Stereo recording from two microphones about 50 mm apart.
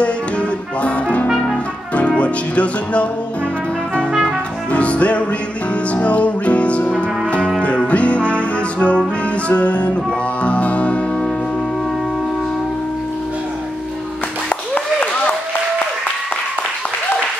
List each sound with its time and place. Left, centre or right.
0.0 s music: left
1.2 s trumpet: centre
2.0 s music: left
4.7 s music: left
7.0 s brass instrument: left
7.6 s music: left
14.7 s a sound: left